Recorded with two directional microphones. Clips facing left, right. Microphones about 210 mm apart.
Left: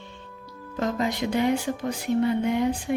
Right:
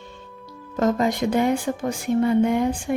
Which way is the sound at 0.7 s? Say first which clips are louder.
Right 5 dB; 45° right (ahead or behind).